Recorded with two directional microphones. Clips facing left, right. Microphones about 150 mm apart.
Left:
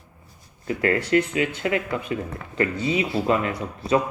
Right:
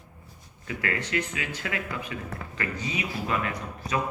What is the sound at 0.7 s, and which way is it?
Speech, 35° left (ahead or behind).